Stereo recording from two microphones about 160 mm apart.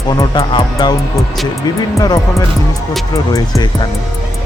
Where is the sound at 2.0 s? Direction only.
25° left (ahead or behind).